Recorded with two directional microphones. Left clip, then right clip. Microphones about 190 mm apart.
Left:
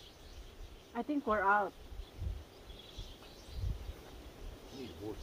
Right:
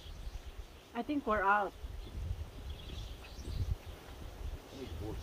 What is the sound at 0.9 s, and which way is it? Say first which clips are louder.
Snake: even; 10° right (ahead or behind).